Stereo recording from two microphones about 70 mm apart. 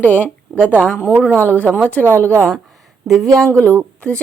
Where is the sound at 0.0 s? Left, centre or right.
Left.